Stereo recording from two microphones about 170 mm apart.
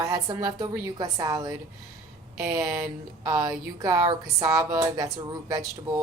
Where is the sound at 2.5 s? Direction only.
20° right (ahead or behind).